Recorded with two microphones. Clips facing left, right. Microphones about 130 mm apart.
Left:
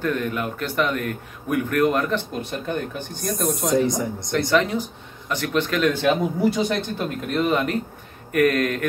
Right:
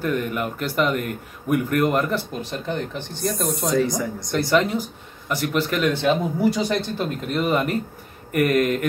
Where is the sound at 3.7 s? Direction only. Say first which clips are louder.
Left 1 dB; 20° left (ahead or behind).